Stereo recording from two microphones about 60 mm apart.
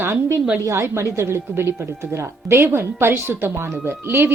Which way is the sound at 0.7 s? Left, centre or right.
Right.